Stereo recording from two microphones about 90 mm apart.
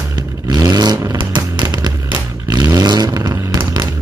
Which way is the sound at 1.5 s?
50° right (ahead or behind).